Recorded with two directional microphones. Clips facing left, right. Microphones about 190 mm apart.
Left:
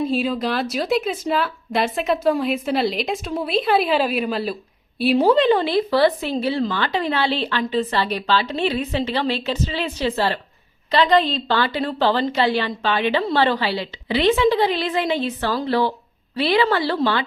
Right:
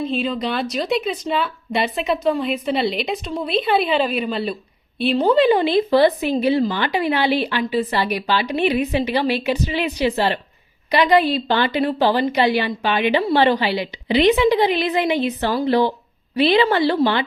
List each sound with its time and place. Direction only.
0.1 s a woman's voice: 5° left (ahead or behind)
5.4 s a woman's voice: 15° right (ahead or behind)